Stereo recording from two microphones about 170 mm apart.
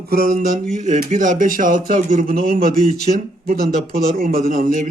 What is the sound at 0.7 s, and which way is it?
Speech, 45° right (ahead or behind).